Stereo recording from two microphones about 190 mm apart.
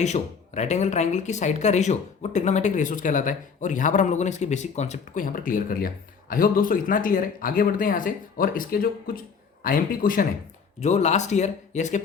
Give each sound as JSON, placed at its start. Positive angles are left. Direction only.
{"t": 0.0, "sound": "speech", "side_deg": 35}
{"t": 10.8, "sound": "speech", "side_deg": 35}